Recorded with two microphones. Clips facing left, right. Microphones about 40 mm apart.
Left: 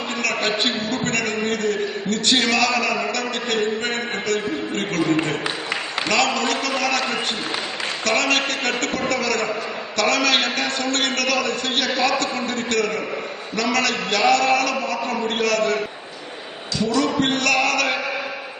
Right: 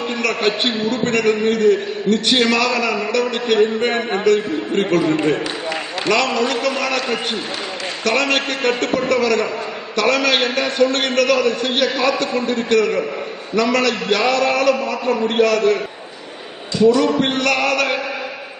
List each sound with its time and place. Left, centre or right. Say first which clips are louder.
0.2 s a man's voice: right 3 dB; centre
6.1 s a man's voice: right 3 dB; centre
17.2 s a man's voice: right 2 dB; centre